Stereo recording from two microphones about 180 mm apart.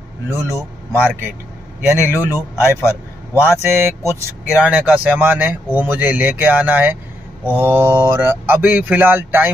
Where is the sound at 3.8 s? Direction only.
15° right (ahead or behind).